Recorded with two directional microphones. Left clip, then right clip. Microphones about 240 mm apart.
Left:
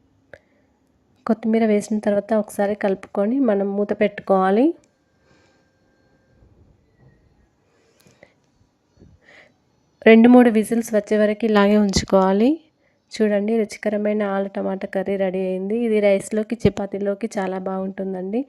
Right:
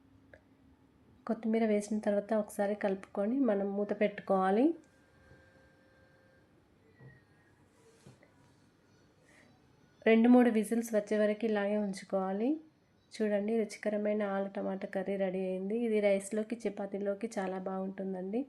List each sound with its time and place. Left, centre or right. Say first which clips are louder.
0.3 s a sound: left 15 dB; left
1.2 s speech: left 13 dB; left
10.0 s speech: left 14 dB; left